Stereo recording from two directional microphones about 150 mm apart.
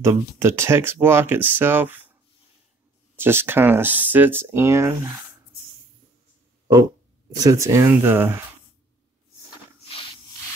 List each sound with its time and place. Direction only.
0.0 s speech: 15° right (ahead or behind)
3.2 s speech: 15° right (ahead or behind)
7.3 s speech: 20° right (ahead or behind)